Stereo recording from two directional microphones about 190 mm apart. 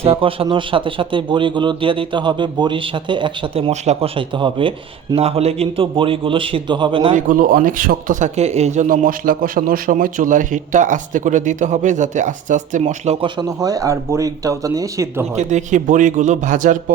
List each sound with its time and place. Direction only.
0.0 s speech: 30° right (ahead or behind)
7.1 s speech: 45° right (ahead or behind); by 15.3 s 15° right (ahead or behind)
15.4 s speech: 40° right (ahead or behind)